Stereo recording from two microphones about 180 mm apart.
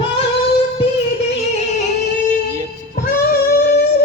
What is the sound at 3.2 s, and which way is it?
Music, 60° left (ahead or behind).